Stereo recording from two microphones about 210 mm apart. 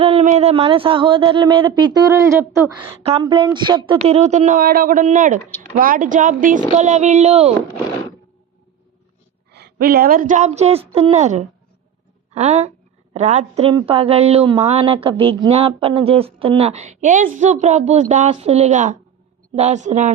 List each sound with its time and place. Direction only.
0.0 s a woman's voice: 30° right (ahead or behind); by 2.9 s 15° right (ahead or behind)
3.0 s speech: 25° right (ahead or behind)
9.5 s a woman's voice: 50° right (ahead or behind)